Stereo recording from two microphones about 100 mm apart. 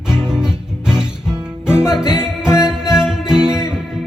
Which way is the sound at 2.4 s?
30° left (ahead or behind).